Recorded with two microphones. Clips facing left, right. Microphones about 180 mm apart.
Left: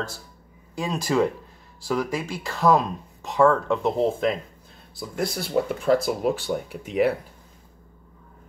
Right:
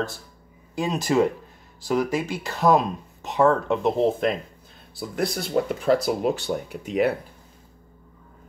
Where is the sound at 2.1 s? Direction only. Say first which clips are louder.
Right 3 dB; centre (ahead or behind).